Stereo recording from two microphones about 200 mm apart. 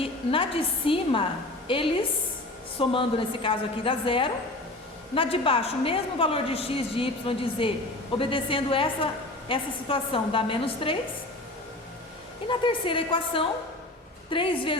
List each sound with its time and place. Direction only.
0.0 s a woman's voice: 25° left (ahead or behind)
12.5 s a woman's voice: 25° left (ahead or behind)